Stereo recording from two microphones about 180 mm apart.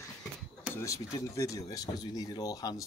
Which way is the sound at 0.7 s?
15° left (ahead or behind).